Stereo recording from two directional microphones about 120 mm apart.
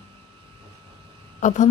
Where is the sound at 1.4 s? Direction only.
90° left.